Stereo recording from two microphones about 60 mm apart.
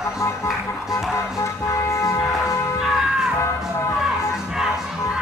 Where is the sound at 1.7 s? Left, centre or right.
Left.